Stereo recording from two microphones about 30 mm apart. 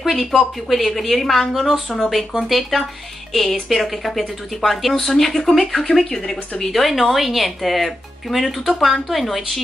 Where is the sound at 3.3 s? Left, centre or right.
Centre.